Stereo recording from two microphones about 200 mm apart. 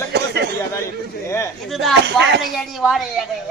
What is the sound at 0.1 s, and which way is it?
Chatter, 55° right (ahead or behind).